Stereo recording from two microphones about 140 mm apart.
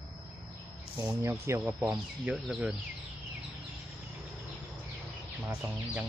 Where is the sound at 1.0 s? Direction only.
20° right (ahead or behind).